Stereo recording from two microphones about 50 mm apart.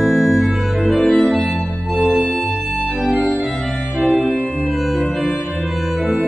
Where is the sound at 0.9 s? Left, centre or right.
Left.